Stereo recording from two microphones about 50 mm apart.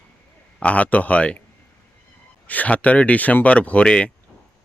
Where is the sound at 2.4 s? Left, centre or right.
Left.